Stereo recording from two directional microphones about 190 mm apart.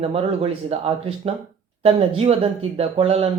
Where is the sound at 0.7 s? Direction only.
30° right (ahead or behind).